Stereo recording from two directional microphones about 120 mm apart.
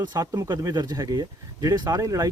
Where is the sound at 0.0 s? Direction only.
30° right (ahead or behind).